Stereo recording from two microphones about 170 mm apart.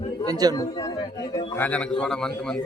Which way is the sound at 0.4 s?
25° right (ahead or behind).